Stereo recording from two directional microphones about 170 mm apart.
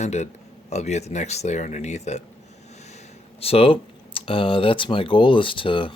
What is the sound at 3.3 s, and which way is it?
Speech, 35° left (ahead or behind).